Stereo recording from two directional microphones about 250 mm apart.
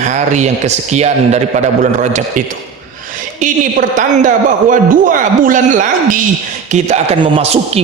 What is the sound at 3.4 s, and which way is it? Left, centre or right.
A man's voice, right.